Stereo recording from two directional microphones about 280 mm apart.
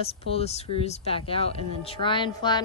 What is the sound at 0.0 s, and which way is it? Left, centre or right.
Speech, left.